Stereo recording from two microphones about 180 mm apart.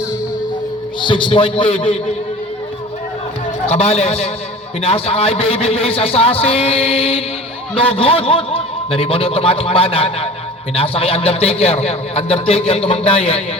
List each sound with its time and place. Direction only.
1.0 s a man's voice: 25° left (ahead or behind)
3.7 s a man's voice: 35° left (ahead or behind)